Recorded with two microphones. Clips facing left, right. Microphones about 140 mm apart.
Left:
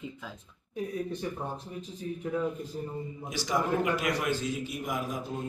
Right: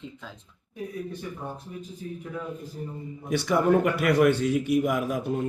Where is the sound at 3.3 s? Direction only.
60° right (ahead or behind).